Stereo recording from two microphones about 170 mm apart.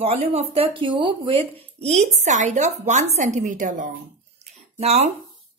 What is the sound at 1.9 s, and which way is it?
A woman's voice, 40° right (ahead or behind).